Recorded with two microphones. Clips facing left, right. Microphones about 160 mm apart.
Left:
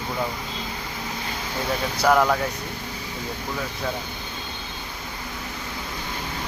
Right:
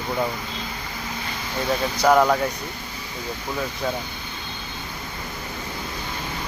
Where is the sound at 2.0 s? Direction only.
10° right (ahead or behind).